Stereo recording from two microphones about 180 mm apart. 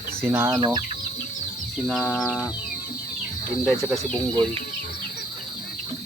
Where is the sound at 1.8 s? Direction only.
Centre (ahead or behind).